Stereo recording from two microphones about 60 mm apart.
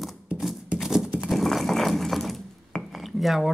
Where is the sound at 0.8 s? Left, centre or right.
Centre.